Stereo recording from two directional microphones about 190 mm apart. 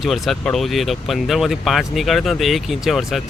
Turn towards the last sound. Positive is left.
turn(degrees=0)  # may be behind; listen again after turning